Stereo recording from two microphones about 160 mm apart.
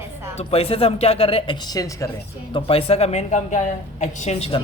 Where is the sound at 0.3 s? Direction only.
40° left (ahead or behind); by 2.0 s 20° left (ahead or behind).